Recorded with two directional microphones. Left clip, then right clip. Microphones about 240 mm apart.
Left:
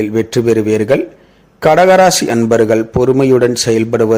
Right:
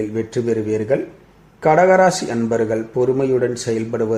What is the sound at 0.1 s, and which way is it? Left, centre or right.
A man's voice, left.